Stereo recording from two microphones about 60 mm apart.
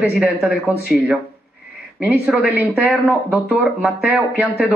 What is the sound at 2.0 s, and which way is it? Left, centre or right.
Speech, right.